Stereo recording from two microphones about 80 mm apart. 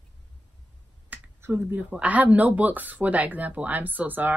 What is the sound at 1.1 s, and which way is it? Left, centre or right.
Speech, right.